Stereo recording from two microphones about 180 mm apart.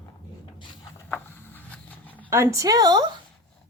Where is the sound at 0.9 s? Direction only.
10° left (ahead or behind).